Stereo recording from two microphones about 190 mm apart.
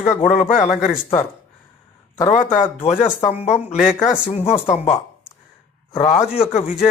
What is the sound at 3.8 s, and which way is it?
Speech, centre (ahead or behind).